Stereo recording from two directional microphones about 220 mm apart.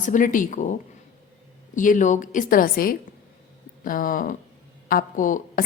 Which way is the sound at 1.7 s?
35° left (ahead or behind).